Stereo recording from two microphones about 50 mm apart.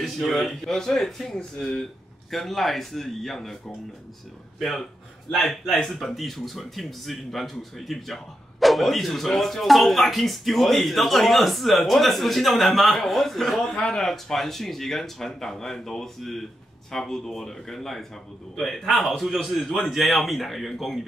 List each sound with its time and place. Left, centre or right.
0.0 s speech: centre
4.6 s speech: centre
14.0 s speech: centre